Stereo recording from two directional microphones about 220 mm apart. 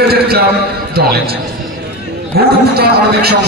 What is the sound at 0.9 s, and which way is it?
A man's voice, 45° right (ahead or behind).